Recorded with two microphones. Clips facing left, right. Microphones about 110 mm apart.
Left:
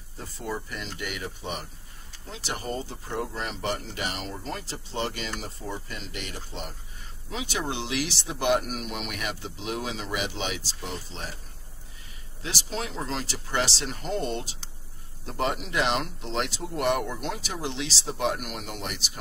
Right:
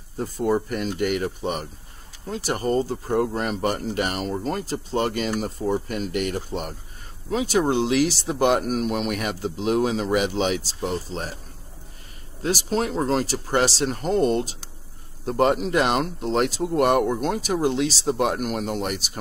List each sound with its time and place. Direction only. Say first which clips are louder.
0.2 s speech: right 11 dB; 50° right (ahead or behind)
12.4 s speech: right 10 dB; 45° right (ahead or behind)